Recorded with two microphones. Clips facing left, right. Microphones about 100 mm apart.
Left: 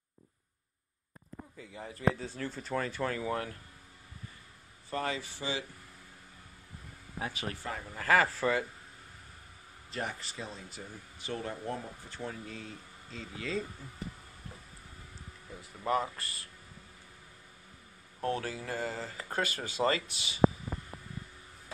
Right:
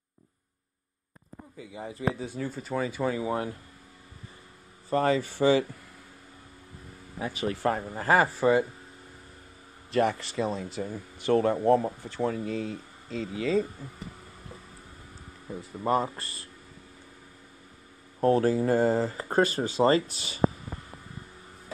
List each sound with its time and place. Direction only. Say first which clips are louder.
1.7 s speech: right 1 dB; 20° right (ahead or behind)
4.8 s speech: right 10 dB; 40° right (ahead or behind); by 5.7 s 55° right (ahead or behind)
7.6 s speech: right 12 dB; 40° right (ahead or behind)
8.0 s speech: right 4 dB; 20° right (ahead or behind)
9.8 s speech: right 13 dB; 75° right (ahead or behind); by 13.2 s 90° right
15.5 s speech: right 11 dB; 45° right (ahead or behind)
15.8 s speech: right 5 dB; 30° right (ahead or behind)
18.2 s speech: right 12 dB; 35° right (ahead or behind)